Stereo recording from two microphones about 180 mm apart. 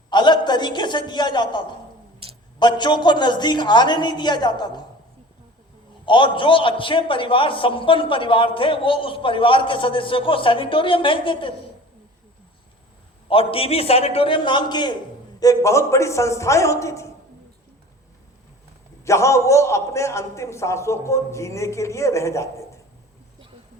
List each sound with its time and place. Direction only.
0.1 s a sound: 25° left (ahead or behind)
2.2 s a sound: 35° right (ahead or behind)
2.6 s a man's voice: 25° left (ahead or behind)
6.1 s a man's voice: 25° left (ahead or behind)
13.2 s a man's voice: 30° left (ahead or behind)
19.0 s a man's voice: 15° left (ahead or behind)